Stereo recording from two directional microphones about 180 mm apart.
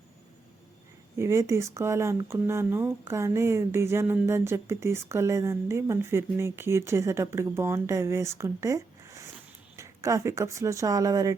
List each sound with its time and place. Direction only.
1.2 s speech: 15° right (ahead or behind)